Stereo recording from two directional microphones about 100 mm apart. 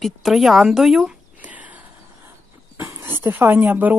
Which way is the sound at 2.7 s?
25° right (ahead or behind).